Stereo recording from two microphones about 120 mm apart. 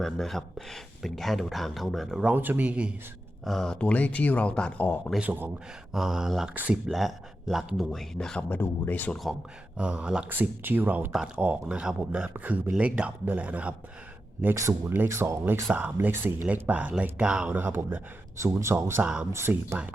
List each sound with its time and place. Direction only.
0.0 s speech: centre (ahead or behind)
2.3 s speech: 15° right (ahead or behind)
3.4 s speech: centre (ahead or behind)
5.2 s speech: 15° right (ahead or behind)
5.9 s speech: 5° right (ahead or behind)
6.8 s speech: centre (ahead or behind); by 9.1 s 15° left (ahead or behind)
9.7 s speech: 10° right (ahead or behind)
14.4 s speech: 25° right (ahead or behind)